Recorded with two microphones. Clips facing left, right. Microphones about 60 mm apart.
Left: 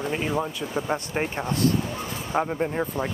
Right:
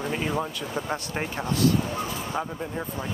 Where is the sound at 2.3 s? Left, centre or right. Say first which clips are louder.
Left 10 dB; left.